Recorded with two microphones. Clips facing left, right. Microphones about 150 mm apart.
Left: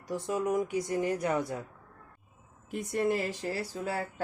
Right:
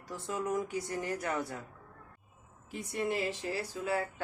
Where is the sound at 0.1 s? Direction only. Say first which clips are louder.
Left 5 dB; 15° left (ahead or behind).